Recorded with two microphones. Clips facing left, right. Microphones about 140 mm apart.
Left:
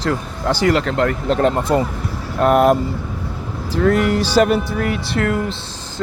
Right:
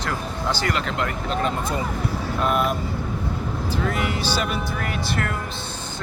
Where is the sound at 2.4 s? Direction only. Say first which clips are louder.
Left 10 dB; 85° left.